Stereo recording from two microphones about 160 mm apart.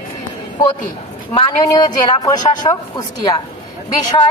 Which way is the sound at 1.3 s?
30° left (ahead or behind).